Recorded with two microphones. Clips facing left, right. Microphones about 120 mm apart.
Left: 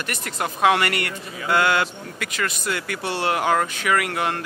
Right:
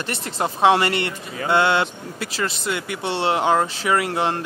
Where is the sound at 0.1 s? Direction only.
30° right (ahead or behind).